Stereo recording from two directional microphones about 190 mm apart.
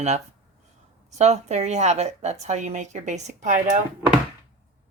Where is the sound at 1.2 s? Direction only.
35° right (ahead or behind).